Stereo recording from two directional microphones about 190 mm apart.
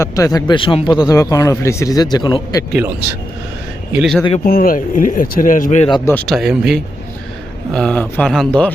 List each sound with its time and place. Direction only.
0.0 s speech: 20° left (ahead or behind)
3.9 s speech: centre (ahead or behind)
4.4 s speech: 50° left (ahead or behind)
5.9 s speech: 15° left (ahead or behind)
6.2 s speech: centre (ahead or behind)